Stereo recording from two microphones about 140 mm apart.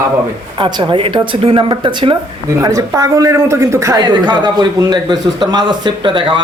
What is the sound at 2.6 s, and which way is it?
Speech, 25° right (ahead or behind).